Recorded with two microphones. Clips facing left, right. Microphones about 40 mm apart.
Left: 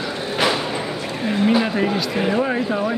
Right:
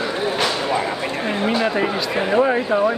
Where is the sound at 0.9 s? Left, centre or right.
Right.